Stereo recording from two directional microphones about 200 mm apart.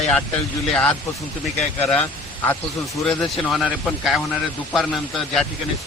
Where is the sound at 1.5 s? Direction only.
5° left (ahead or behind).